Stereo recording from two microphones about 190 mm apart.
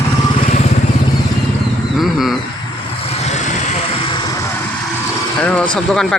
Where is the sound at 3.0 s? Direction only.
35° left (ahead or behind).